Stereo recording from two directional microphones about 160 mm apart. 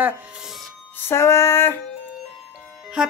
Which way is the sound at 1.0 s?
15° left (ahead or behind).